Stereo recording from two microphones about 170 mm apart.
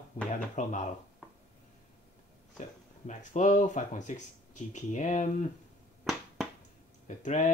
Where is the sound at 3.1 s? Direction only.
45° left (ahead or behind).